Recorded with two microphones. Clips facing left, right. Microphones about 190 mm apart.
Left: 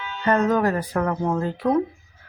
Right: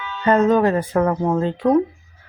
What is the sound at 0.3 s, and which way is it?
Speech, 25° right (ahead or behind).